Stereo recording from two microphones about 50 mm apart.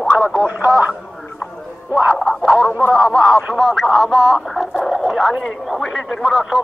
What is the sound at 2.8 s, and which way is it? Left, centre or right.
Speech, centre.